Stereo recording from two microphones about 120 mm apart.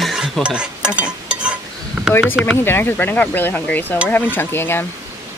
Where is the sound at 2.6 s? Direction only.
20° left (ahead or behind).